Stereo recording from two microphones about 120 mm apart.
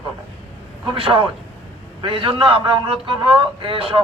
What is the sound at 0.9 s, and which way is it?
A man's voice, 50° right (ahead or behind).